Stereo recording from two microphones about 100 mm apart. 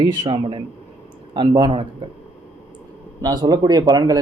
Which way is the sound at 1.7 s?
60° right (ahead or behind).